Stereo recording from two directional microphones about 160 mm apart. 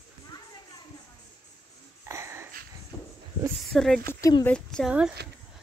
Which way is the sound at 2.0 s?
15° right (ahead or behind).